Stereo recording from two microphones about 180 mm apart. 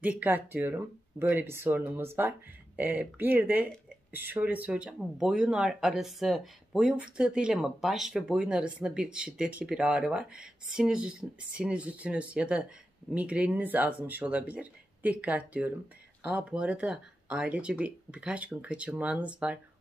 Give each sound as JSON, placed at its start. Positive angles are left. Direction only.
{"t": 0.0, "sound": "speech", "side_deg": -10}